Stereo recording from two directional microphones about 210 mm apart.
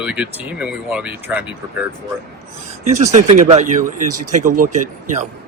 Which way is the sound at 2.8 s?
35° right (ahead or behind).